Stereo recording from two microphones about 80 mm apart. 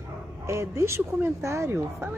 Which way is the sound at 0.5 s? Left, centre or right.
Right.